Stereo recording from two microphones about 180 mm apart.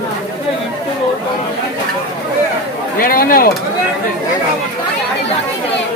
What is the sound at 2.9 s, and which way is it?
Speech, 55° left (ahead or behind).